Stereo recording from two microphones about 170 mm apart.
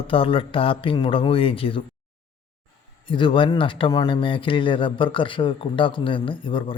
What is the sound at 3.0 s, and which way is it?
Speech, 30° left (ahead or behind).